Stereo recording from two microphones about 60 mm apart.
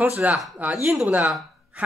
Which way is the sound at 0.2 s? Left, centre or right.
Right.